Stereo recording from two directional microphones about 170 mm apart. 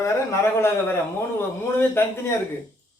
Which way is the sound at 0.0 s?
15° left (ahead or behind).